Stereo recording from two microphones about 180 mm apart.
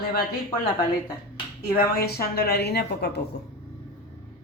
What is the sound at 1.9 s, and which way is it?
Speech, 60° left (ahead or behind).